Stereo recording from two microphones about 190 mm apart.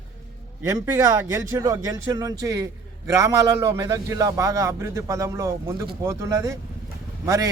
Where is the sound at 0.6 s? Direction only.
15° right (ahead or behind).